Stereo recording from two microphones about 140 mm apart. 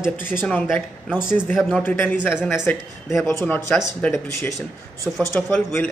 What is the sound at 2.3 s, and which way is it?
Speech, 5° right (ahead or behind).